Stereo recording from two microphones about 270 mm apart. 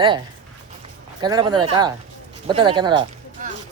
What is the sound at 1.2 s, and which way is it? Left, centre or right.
Speech, centre.